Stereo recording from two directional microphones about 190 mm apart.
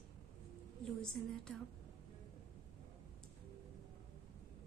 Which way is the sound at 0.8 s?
5° left (ahead or behind).